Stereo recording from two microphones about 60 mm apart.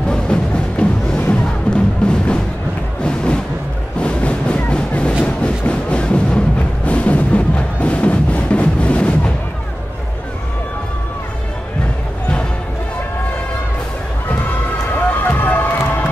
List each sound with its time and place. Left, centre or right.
0.1 s music: centre
4.0 s a sound: centre
5.2 s music: centre
15.0 s run: left